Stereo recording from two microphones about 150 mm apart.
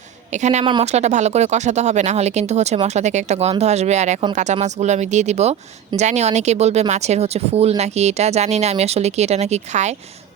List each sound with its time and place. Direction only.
0.3 s speech: 50° right (ahead or behind)